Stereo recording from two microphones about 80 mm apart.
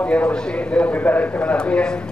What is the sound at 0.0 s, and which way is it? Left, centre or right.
Speech, centre.